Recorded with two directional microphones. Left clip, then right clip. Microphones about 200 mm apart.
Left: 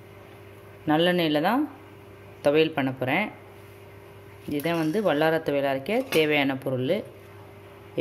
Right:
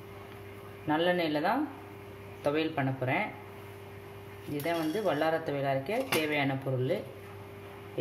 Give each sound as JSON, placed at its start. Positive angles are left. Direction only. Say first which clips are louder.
{"t": 0.8, "sound": "speech", "louder": "left 6 dB", "side_deg": 55}
{"t": 4.6, "sound": "speech", "louder": "left 5 dB", "side_deg": 55}